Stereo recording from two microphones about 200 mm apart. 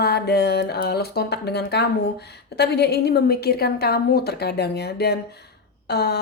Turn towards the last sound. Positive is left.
turn(degrees=55)  # may be behind; listen again after turning